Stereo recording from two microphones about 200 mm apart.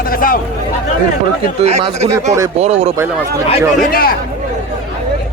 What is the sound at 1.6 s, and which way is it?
Speech, 30° right (ahead or behind).